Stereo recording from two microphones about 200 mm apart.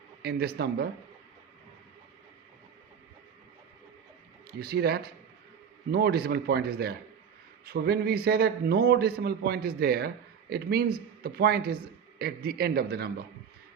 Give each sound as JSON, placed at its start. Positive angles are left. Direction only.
{"t": 0.2, "sound": "a man's voice", "side_deg": -50}
{"t": 4.6, "sound": "a man's voice", "side_deg": -50}